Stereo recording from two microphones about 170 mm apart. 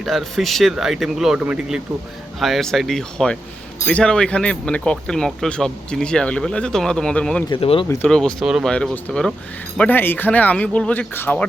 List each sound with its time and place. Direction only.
0.0 s speech: centre (ahead or behind)
7.5 s speech: 30° left (ahead or behind)
8.0 s speech: 5° left (ahead or behind)